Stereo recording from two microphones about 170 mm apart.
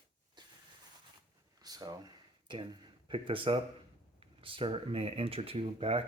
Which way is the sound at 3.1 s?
30° right (ahead or behind).